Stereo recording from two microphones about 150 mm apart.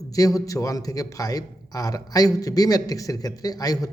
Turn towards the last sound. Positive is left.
turn(degrees=25)  # may be behind; listen again after turning